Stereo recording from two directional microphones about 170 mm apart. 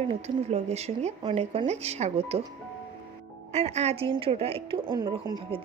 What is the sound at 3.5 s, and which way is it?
Speech, 40° right (ahead or behind).